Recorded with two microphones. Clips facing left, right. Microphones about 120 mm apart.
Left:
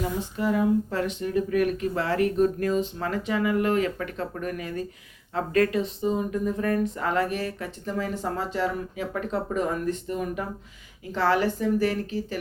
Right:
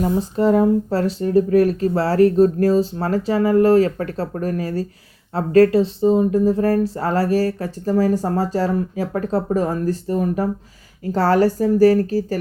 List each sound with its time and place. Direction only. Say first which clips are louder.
0.0 s speech: right 9 dB; 40° right (ahead or behind)